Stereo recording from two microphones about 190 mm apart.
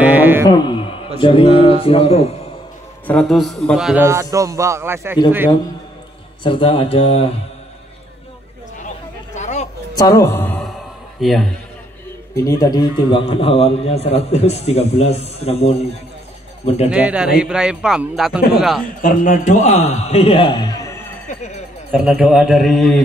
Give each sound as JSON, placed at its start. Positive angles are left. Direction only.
{"t": 0.0, "sound": "music", "side_deg": -10}
{"t": 0.5, "sound": "a man's voice", "side_deg": 25}
{"t": 3.1, "sound": "a man's voice", "side_deg": 5}
{"t": 6.4, "sound": "a man's voice", "side_deg": 25}
{"t": 9.3, "sound": "a sound", "side_deg": 40}
{"t": 9.9, "sound": "music", "side_deg": 15}
{"t": 11.1, "sound": "a man's voice", "side_deg": 0}
{"t": 12.4, "sound": "a man's voice", "side_deg": 20}
{"t": 16.9, "sound": "a man's voice", "side_deg": -5}
{"t": 18.9, "sound": "a man's voice", "side_deg": 45}
{"t": 21.9, "sound": "a man's voice", "side_deg": -5}